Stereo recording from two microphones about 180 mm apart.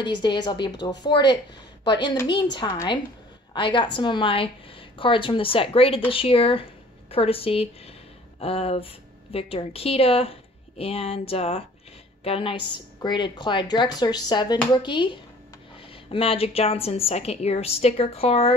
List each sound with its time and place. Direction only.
0.0 s a woman's voice: 25° left (ahead or behind)